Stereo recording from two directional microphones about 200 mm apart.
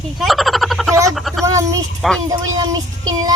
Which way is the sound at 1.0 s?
Centre (ahead or behind).